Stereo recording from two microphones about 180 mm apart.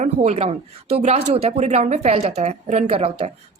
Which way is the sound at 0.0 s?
35° right (ahead or behind).